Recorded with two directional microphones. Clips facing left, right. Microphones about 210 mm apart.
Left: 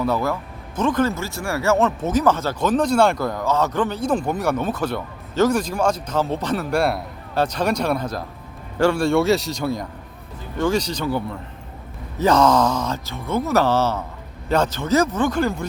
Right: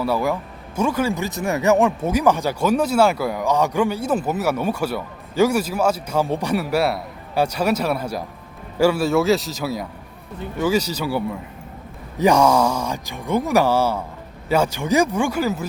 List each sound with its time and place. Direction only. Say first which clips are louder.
0.0 s speech: right 1 dB; 10° right (ahead or behind)